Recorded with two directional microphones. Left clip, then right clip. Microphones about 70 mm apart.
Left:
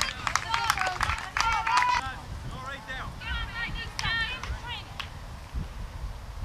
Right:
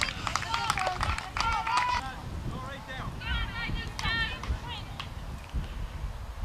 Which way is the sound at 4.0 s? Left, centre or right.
Left.